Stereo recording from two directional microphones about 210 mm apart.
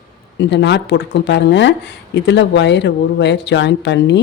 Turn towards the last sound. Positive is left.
turn(degrees=55)  # may be behind; listen again after turning